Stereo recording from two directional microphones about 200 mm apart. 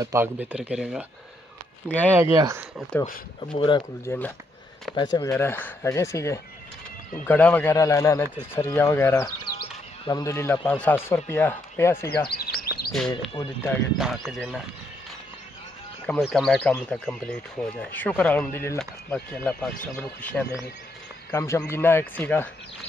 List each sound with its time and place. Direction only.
0.0 s speech: 15° right (ahead or behind)
1.9 s speech: 10° left (ahead or behind)
2.1 s speech: 15° right (ahead or behind)
3.3 s speech: 25° left (ahead or behind)
12.3 s bird: 50° left (ahead or behind)
13.4 s speech: 15° left (ahead or behind)
13.9 s speech: centre (ahead or behind)
16.1 s speech: centre (ahead or behind)